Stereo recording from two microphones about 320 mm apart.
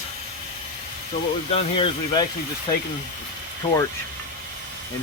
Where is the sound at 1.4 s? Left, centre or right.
Centre.